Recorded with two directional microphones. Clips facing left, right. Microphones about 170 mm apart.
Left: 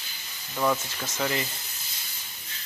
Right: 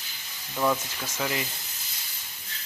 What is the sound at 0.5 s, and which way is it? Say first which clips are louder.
Speech: even; centre (ahead or behind).